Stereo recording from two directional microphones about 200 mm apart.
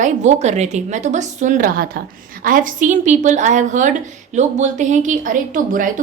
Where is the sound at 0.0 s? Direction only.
35° right (ahead or behind).